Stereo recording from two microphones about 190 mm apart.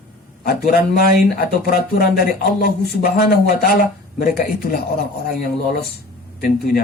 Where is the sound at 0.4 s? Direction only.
55° left (ahead or behind).